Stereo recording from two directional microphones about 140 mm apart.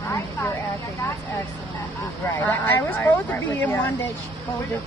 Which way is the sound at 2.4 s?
15° left (ahead or behind).